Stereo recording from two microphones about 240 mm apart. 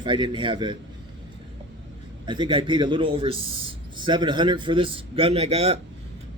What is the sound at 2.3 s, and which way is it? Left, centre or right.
A man's voice, centre.